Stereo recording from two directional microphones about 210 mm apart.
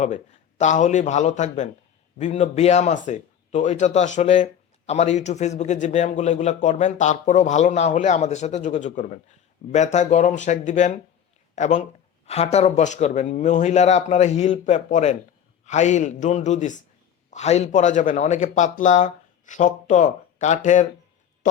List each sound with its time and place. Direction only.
0.6 s a man's voice: 35° left (ahead or behind)